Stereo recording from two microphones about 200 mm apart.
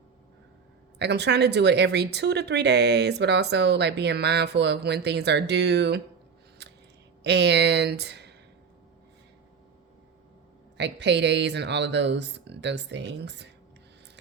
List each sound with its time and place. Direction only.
0.9 s speech: 60° right (ahead or behind)
6.6 s a sound: 55° right (ahead or behind)
7.3 s speech: 55° right (ahead or behind)
10.8 s speech: 60° right (ahead or behind)